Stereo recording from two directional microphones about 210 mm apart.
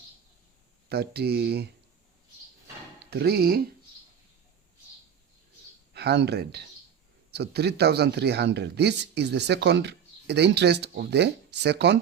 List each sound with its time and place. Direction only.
0.9 s speech: 50° right (ahead or behind)
3.1 s speech: 50° right (ahead or behind)
5.9 s speech: 50° right (ahead or behind)